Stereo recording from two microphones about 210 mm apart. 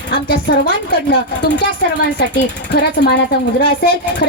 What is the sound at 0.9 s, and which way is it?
Speech, 45° left (ahead or behind).